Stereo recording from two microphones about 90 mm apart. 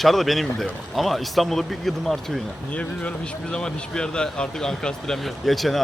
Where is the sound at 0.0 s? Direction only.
Centre (ahead or behind).